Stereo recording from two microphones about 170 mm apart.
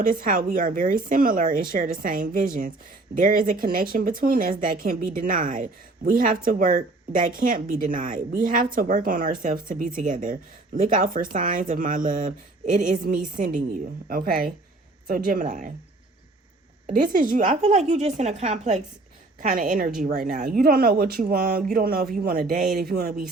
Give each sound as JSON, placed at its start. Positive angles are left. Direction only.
{"t": 0.0, "sound": "speech", "side_deg": -55}
{"t": 16.9, "sound": "speech", "side_deg": -50}